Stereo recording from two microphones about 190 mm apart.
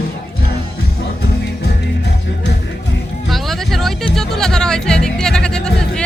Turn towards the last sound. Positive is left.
turn(degrees=5)  # may be behind; listen again after turning